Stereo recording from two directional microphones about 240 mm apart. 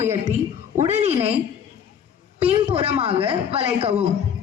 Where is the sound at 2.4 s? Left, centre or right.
Right.